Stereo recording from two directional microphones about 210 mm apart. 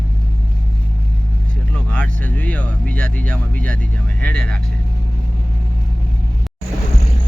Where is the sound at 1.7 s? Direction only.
5° left (ahead or behind).